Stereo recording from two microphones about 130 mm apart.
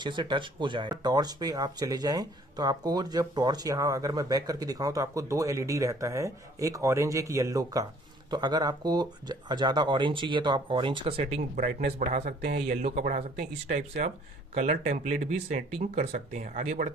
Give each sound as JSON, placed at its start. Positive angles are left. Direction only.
{"t": 0.0, "sound": "speech", "side_deg": -35}
{"t": 11.5, "sound": "speech", "side_deg": -75}